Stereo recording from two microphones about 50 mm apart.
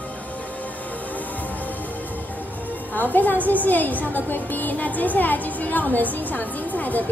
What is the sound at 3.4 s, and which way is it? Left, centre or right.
A woman's voice, left.